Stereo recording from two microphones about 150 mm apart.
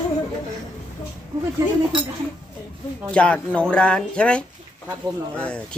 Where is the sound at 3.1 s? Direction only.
5° left (ahead or behind).